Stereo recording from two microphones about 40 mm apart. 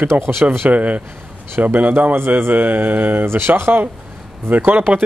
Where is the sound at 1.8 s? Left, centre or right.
Right.